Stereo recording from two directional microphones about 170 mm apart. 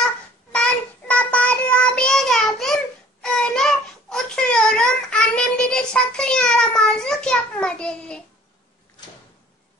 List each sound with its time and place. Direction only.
0.5 s child singing: 5° left (ahead or behind)